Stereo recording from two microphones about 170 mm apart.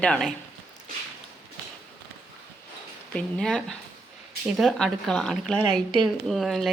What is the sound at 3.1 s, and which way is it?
A woman's voice, 5° left (ahead or behind).